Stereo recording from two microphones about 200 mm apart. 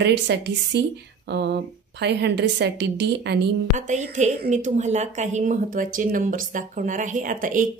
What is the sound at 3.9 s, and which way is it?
A woman's voice, 35° right (ahead or behind).